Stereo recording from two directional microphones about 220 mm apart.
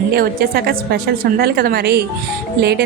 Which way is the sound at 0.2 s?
45° right (ahead or behind).